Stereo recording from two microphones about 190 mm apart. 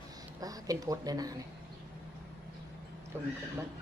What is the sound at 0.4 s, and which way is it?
Speech, 20° right (ahead or behind).